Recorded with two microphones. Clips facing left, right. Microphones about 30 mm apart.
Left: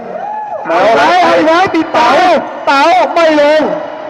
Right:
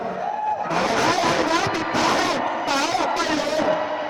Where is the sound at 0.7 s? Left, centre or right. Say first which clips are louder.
Left 15 dB; left.